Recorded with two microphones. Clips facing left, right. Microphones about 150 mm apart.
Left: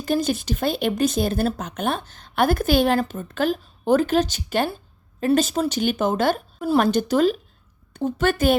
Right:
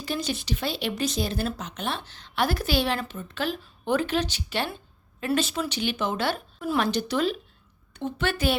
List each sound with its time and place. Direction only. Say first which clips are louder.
0.0 s speech: left 8 dB; 50° left (ahead or behind)